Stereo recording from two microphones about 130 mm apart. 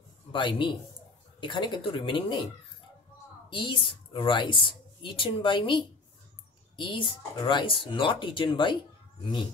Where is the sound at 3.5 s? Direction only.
40° left (ahead or behind).